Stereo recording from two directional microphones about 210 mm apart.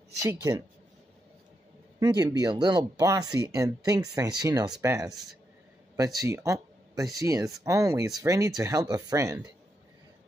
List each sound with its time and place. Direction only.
0.2 s speech: 10° right (ahead or behind)
2.0 s speech: 20° right (ahead or behind)
4.6 s speech: centre (ahead or behind)
5.9 s speech: 15° right (ahead or behind)